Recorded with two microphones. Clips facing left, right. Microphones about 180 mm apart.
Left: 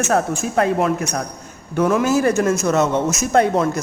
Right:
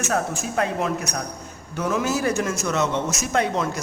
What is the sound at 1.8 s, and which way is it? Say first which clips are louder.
Speech: left 7 dB; 55° left (ahead or behind).